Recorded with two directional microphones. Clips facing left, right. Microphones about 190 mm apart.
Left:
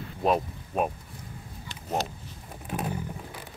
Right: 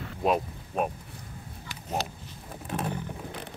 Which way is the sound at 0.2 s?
Centre (ahead or behind).